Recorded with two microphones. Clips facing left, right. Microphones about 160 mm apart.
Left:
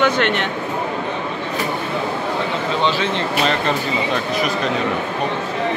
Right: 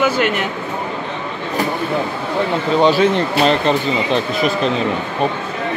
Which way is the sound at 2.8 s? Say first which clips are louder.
Right 8 dB; 40° right (ahead or behind).